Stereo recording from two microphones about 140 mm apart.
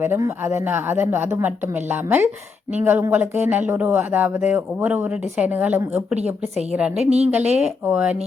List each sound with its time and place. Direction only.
0.0 s speech: 20° right (ahead or behind)